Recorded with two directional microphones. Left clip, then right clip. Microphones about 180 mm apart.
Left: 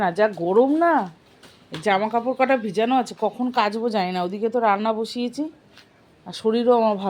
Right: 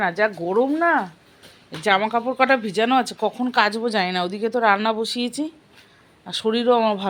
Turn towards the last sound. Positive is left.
turn(degrees=5)  # may be behind; listen again after turning